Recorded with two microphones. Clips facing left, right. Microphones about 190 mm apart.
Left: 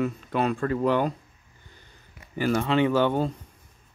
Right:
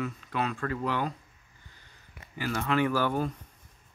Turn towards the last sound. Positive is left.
turn(degrees=25)  # may be behind; listen again after turning